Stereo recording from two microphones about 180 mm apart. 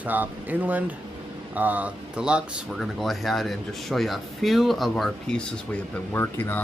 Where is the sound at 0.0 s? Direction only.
10° right (ahead or behind).